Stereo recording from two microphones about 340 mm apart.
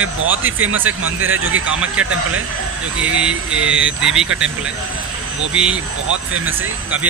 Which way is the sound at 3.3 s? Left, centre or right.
Right.